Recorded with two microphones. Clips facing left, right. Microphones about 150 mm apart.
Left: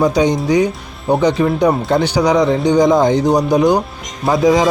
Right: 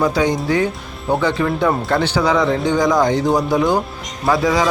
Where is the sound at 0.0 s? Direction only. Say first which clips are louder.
Left 3 dB; 20° left (ahead or behind).